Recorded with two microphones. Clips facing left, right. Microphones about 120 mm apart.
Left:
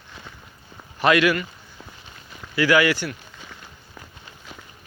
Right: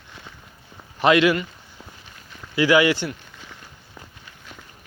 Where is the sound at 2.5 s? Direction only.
20° right (ahead or behind).